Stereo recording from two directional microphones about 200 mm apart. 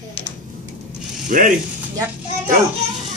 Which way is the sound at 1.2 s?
40° right (ahead or behind).